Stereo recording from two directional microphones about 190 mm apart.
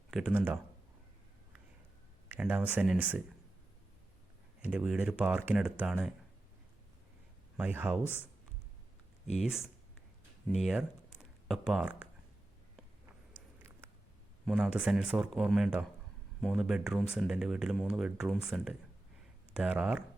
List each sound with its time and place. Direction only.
0.1 s speech: 5° right (ahead or behind)
2.3 s speech: 10° right (ahead or behind)
4.6 s speech: 10° right (ahead or behind)
7.5 s speech: 10° right (ahead or behind)
8.0 s speech: 10° left (ahead or behind)
9.3 s speech: centre (ahead or behind)
13.6 s a sound: 10° right (ahead or behind)
14.4 s speech: 5° right (ahead or behind)